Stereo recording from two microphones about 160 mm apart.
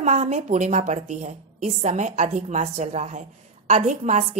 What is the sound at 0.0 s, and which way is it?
A woman's voice, 45° right (ahead or behind).